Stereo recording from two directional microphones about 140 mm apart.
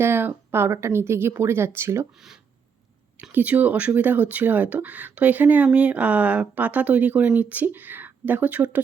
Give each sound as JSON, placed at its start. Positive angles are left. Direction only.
{"t": 0.0, "sound": "speech", "side_deg": -15}
{"t": 2.1, "sound": "speech", "side_deg": -5}